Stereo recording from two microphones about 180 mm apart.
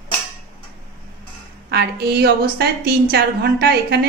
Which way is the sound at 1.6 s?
65° right (ahead or behind).